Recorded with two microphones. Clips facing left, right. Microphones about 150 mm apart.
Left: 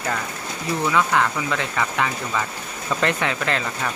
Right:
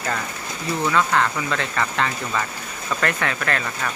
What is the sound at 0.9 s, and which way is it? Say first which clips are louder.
Speech: even; 10° left (ahead or behind).